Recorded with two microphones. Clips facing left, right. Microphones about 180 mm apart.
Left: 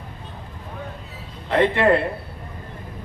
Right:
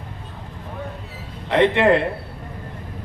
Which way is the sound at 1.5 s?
20° right (ahead or behind).